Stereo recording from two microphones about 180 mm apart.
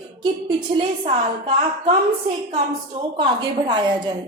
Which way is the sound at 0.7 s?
35° right (ahead or behind).